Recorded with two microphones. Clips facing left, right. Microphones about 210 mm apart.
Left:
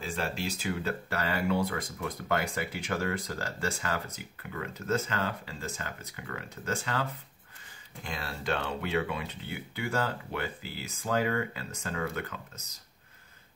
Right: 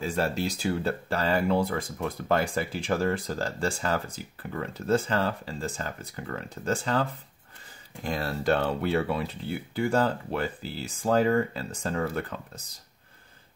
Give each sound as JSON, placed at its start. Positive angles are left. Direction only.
{"t": 0.0, "sound": "speech", "side_deg": -40}